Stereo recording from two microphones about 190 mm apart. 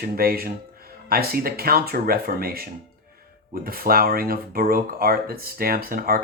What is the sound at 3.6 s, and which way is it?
Speech, 50° right (ahead or behind).